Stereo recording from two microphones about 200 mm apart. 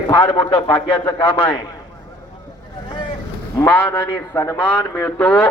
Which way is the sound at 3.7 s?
10° left (ahead or behind).